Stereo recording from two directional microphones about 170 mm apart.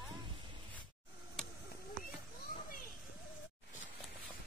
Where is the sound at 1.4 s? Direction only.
5° left (ahead or behind).